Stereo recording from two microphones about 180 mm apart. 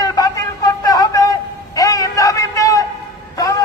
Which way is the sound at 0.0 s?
20° left (ahead or behind).